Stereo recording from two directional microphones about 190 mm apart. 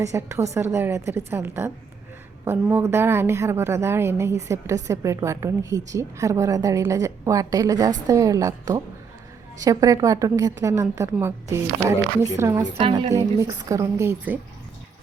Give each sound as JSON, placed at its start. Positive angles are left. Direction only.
{"t": 0.0, "sound": "a woman's voice", "side_deg": -15}
{"t": 12.6, "sound": "a woman's voice", "side_deg": -35}
{"t": 12.9, "sound": "a woman's voice", "side_deg": -15}